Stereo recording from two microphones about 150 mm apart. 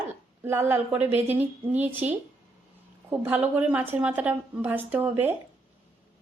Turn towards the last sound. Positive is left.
turn(degrees=-10)  # may be behind; listen again after turning